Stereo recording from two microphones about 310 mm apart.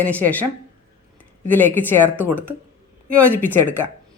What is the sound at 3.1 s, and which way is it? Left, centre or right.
Speech, centre.